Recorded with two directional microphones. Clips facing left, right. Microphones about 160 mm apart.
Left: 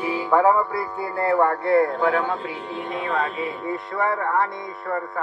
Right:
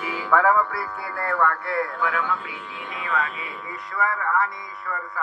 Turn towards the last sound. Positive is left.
turn(degrees=50)  # may be behind; listen again after turning